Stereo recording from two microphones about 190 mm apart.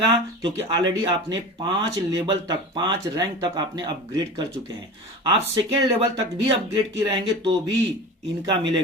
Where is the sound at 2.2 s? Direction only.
20° right (ahead or behind).